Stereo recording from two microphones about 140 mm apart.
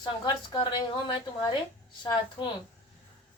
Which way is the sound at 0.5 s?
35° left (ahead or behind).